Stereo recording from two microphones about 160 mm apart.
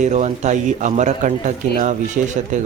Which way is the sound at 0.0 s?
45° right (ahead or behind).